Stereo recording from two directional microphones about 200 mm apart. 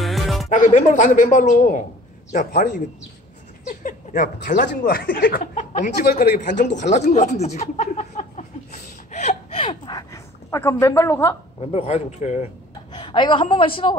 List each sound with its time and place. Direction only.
0.0 s music: centre (ahead or behind)
0.5 s speech: 40° left (ahead or behind)
3.8 s speech: 40° left (ahead or behind); by 11.3 s 10° left (ahead or behind)
11.7 s speech: 35° left (ahead or behind)
12.9 s a woman's voice: 25° left (ahead or behind)